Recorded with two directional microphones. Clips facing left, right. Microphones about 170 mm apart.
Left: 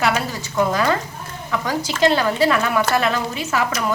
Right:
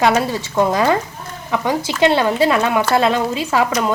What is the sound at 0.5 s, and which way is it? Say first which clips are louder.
A woman's voice: right 3 dB; 25° right (ahead or behind).